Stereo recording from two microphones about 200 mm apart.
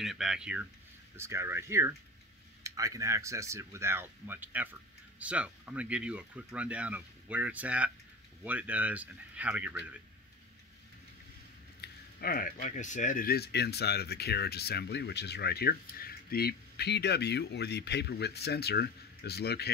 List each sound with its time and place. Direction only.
0.0 s speech: centre (ahead or behind)
11.8 s speech: 50° left (ahead or behind)